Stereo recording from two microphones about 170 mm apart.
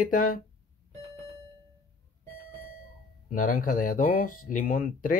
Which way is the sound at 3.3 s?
55° left (ahead or behind).